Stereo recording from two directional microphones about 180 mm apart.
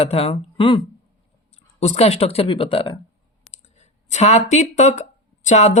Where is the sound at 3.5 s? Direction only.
40° left (ahead or behind).